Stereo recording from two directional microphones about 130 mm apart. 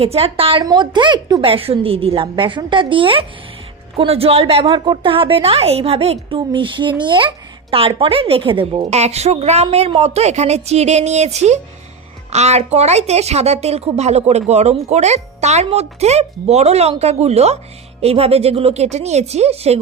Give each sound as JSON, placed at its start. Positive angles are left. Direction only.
{"t": 0.0, "sound": "a woman's voice", "side_deg": -50}
{"t": 0.6, "sound": "a woman's voice", "side_deg": -35}